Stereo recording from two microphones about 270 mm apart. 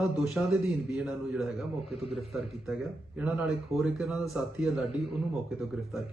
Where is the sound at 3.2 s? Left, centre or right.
Centre.